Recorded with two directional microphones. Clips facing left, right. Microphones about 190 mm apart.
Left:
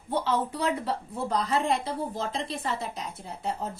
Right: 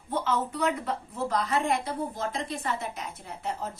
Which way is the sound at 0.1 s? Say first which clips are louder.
Left 1 dB; 30° left (ahead or behind).